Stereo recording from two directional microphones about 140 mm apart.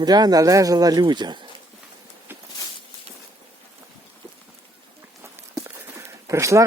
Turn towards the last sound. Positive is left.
turn(degrees=-20)  # may be behind; listen again after turning